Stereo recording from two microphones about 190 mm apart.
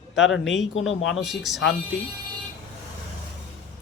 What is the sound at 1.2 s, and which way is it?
Speech, centre (ahead or behind).